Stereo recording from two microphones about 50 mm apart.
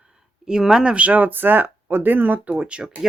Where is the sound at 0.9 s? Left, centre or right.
Right.